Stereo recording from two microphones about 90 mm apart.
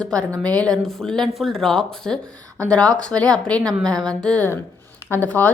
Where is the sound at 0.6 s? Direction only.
5° left (ahead or behind).